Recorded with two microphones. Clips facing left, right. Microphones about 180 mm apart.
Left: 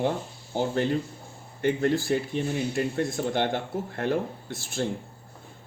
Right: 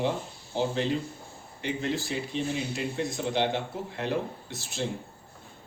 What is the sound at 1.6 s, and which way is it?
Speech, 50° left (ahead or behind).